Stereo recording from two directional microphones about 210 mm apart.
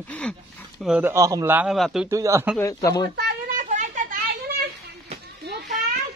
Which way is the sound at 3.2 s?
45° right (ahead or behind).